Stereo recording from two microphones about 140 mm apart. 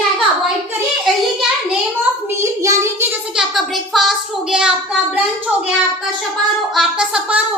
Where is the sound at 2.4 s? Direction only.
20° right (ahead or behind).